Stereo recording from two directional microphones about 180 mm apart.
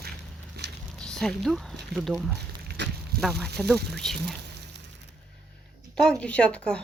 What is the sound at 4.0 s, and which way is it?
Speech, centre (ahead or behind).